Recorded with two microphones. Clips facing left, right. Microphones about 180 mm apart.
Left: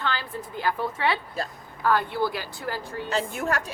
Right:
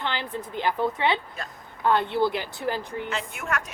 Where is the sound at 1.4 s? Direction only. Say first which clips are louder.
Left 6 dB; 35° left (ahead or behind).